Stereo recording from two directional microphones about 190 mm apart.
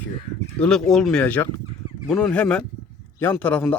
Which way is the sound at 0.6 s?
5° left (ahead or behind).